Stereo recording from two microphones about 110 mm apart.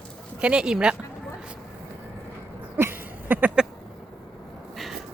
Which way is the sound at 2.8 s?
20° right (ahead or behind).